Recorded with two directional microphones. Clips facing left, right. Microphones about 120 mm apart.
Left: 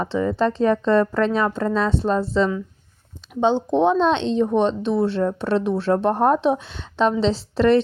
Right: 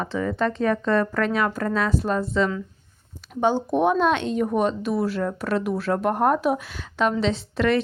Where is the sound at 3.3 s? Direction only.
20° left (ahead or behind).